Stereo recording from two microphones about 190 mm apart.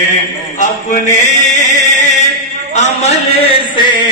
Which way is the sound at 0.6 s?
40° left (ahead or behind).